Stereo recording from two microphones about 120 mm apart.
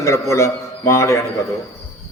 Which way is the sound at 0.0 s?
25° left (ahead or behind).